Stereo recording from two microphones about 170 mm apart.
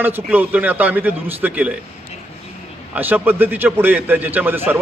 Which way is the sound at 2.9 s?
10° right (ahead or behind).